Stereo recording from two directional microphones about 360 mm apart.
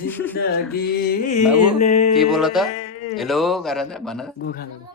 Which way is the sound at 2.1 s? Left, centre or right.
Centre.